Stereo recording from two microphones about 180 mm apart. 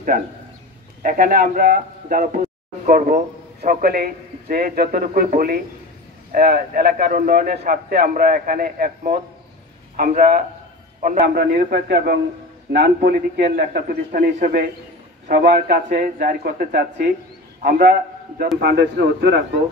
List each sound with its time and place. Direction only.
1.0 s speech: 50° right (ahead or behind)
3.6 s a man's voice: 55° right (ahead or behind)
11.2 s a man's voice: 65° right (ahead or behind)